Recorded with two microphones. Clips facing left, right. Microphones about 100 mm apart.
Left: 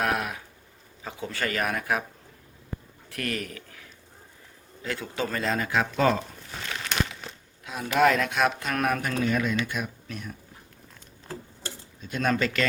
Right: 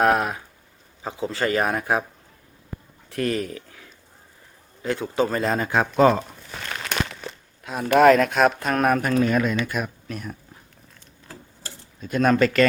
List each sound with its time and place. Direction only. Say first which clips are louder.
0.0 s speech: right 8 dB; 35° right (ahead or behind)
3.1 s speech: right 7 dB; 25° right (ahead or behind)
4.8 s speech: right 8 dB; 30° right (ahead or behind)
6.1 s crumpling: right 3 dB; 50° right (ahead or behind)
7.6 s speech: right 6 dB; 50° right (ahead or behind)
12.0 s speech: right 7 dB; 50° right (ahead or behind)